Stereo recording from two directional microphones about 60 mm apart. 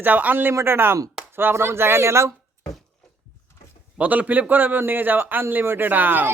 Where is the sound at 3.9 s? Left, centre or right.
Right.